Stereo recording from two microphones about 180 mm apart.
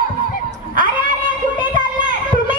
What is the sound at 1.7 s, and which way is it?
Children playing, 50° right (ahead or behind).